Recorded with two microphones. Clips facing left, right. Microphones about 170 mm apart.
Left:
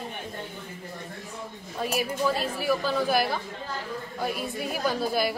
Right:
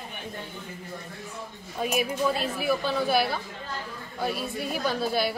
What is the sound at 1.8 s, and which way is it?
Speech, 10° right (ahead or behind).